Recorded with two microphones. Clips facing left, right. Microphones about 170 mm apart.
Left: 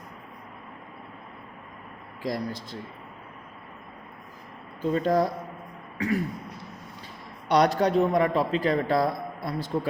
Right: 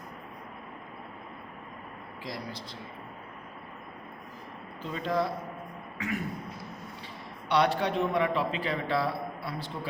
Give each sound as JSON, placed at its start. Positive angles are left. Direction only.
{"t": 2.2, "sound": "a man's voice", "side_deg": 45}
{"t": 4.9, "sound": "a man's voice", "side_deg": 45}
{"t": 7.4, "sound": "a man's voice", "side_deg": 40}